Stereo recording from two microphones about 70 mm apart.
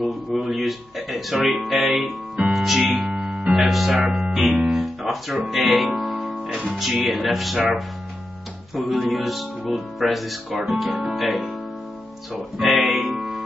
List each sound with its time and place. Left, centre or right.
0.0 s music: centre
2.9 s speech: right
3.2 s keyboard: centre
4.6 s music: centre
7.1 s speech: centre
13.1 s music: centre